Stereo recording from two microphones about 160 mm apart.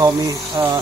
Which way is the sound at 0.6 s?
25° right (ahead or behind).